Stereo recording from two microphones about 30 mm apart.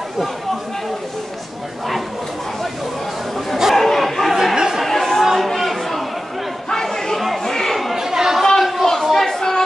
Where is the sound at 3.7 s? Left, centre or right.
Centre.